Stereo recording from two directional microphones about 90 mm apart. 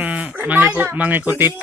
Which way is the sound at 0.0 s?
15° right (ahead or behind).